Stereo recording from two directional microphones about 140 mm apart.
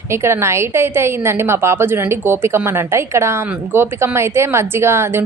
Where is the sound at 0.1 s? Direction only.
20° right (ahead or behind).